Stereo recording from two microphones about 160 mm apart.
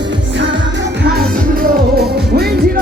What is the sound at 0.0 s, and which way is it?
Music, 90° right.